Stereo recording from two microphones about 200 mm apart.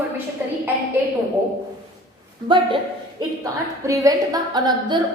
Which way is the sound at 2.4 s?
25° right (ahead or behind).